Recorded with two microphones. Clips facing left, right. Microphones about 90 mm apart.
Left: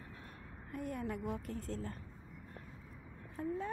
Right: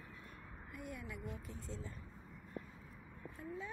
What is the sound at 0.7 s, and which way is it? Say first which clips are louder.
A woman's voice: left 9 dB; 45° left (ahead or behind).